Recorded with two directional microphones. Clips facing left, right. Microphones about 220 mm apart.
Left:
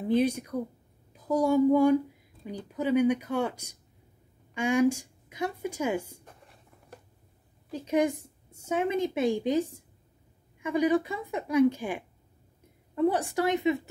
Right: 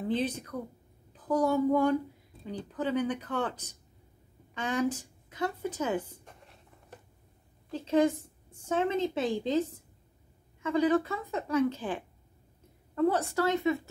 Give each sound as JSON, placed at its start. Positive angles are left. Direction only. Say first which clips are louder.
{"t": 0.0, "sound": "a woman's voice", "louder": "left 5 dB", "side_deg": 10}
{"t": 6.4, "sound": "writing", "louder": "even", "side_deg": 0}
{"t": 7.7, "sound": "a woman's voice", "louder": "right 1 dB", "side_deg": 15}